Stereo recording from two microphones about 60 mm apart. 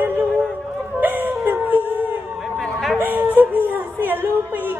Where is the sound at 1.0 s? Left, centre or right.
Right.